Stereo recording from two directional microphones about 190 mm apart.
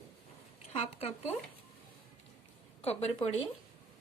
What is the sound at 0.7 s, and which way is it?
Speech, 30° left (ahead or behind).